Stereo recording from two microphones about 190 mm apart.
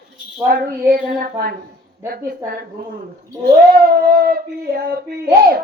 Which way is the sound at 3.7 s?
50° right (ahead or behind).